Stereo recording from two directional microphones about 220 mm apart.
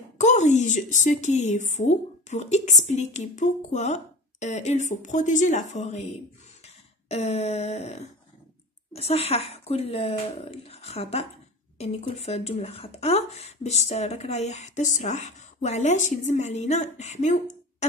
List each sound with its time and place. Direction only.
0.2 s speech: 30° left (ahead or behind)
6.6 s a sound: 30° left (ahead or behind)
8.9 s speech: 25° left (ahead or behind)